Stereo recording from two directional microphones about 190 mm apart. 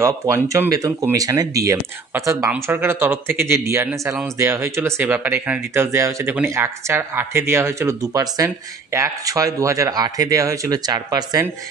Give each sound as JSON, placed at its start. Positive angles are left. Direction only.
{"t": 0.0, "sound": "speech", "side_deg": -15}